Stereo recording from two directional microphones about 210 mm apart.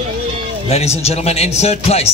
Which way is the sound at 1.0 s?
30° left (ahead or behind).